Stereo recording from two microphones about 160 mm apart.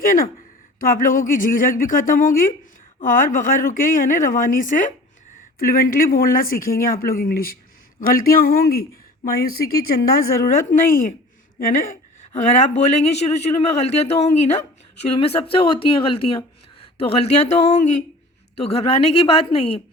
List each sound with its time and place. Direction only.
0.0 s a woman's voice: 60° left (ahead or behind)
5.5 s a woman's voice: 65° left (ahead or behind)
12.3 s a man's voice: 45° left (ahead or behind)
16.8 s a sound: 35° left (ahead or behind)
17.6 s a man's voice: 40° left (ahead or behind)